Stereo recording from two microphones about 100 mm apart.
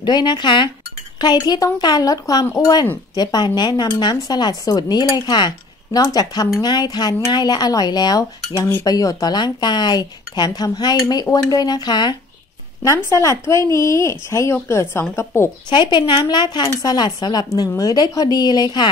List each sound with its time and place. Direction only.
0.0 s a woman's voice: 50° left (ahead or behind)
2.5 s dishes: 40° left (ahead or behind)
3.2 s a woman's voice: 45° left (ahead or behind)
5.9 s dishes: 40° left (ahead or behind)
6.6 s a woman's voice: 45° left (ahead or behind)
7.3 s dishes: 45° left (ahead or behind)
8.8 s a woman's voice: 40° left (ahead or behind)
12.8 s speech: 35° left (ahead or behind)
15.7 s a woman's voice: 50° left (ahead or behind)